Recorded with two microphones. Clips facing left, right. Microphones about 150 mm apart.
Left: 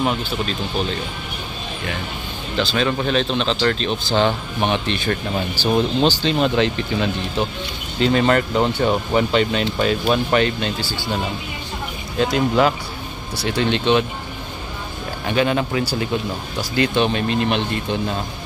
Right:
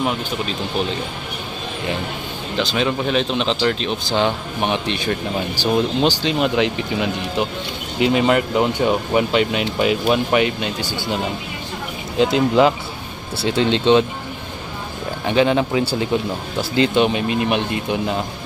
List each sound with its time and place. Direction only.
2.5 s speech: 15° right (ahead or behind)
12.2 s speech: 20° right (ahead or behind)
15.2 s speech: 20° right (ahead or behind)